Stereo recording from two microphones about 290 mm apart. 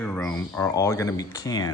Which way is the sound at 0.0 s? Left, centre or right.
Centre.